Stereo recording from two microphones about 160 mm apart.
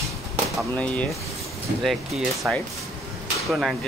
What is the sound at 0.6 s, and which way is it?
Speech, 10° left (ahead or behind).